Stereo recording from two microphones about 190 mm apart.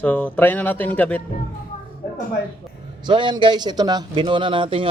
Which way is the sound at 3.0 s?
25° right (ahead or behind).